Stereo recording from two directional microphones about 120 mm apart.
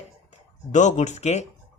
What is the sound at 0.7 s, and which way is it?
Speech, 85° left.